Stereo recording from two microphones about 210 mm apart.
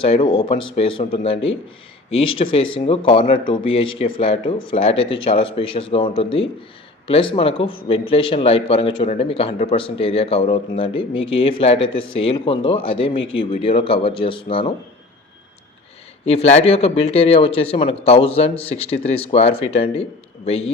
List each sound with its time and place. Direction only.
0.0 s a man's voice: 25° left (ahead or behind)
16.2 s a man's voice: 30° left (ahead or behind)